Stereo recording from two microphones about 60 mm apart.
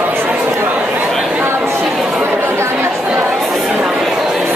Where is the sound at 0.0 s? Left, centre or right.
Right.